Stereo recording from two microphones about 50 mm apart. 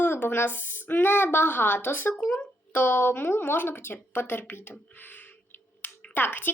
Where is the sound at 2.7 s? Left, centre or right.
Left.